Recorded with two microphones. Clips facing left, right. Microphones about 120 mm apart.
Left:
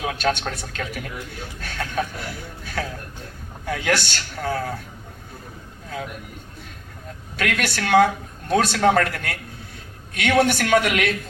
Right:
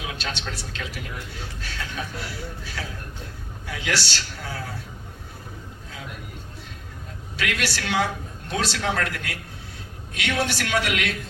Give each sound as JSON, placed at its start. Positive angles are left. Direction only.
{"t": 0.0, "sound": "a man's voice", "side_deg": 50}
{"t": 7.3, "sound": "a man's voice", "side_deg": 50}